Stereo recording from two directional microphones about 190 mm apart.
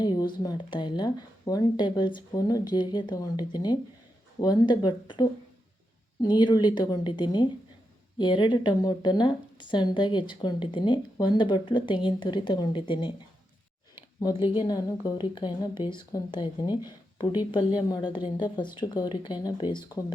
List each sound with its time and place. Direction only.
0.0 s a sound: 25° left (ahead or behind)
0.4 s speech: 25° left (ahead or behind)
14.6 s speech: 20° left (ahead or behind)